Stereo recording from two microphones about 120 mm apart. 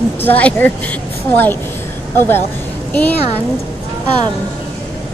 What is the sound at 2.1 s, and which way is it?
A woman's voice, 20° left (ahead or behind).